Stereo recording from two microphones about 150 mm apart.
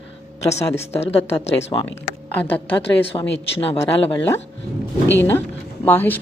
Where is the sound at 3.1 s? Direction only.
35° left (ahead or behind).